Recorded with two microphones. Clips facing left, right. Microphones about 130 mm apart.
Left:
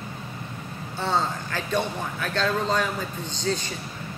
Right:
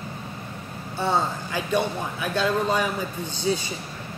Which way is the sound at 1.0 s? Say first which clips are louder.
Right 2 dB; 10° right (ahead or behind).